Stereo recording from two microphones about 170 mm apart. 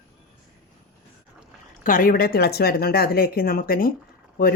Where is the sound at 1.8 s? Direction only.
55° left (ahead or behind).